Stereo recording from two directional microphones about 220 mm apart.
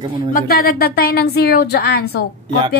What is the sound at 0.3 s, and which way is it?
A woman's voice, 40° left (ahead or behind).